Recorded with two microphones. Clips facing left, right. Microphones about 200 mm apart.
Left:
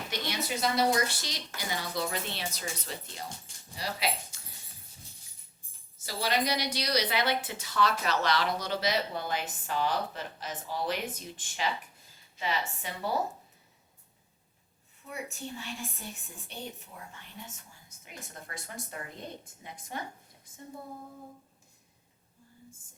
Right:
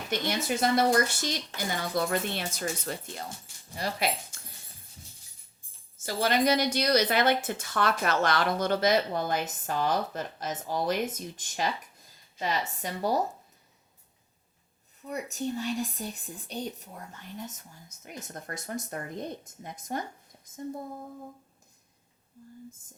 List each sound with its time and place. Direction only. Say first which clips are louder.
0.1 s a woman's voice: right 6 dB; 50° right (ahead or behind)
6.1 s a woman's voice: right 5 dB; 50° right (ahead or behind)
15.0 s a woman's voice: right 7 dB; 40° right (ahead or behind)